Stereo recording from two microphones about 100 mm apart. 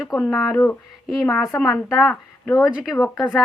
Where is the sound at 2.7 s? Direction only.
10° right (ahead or behind).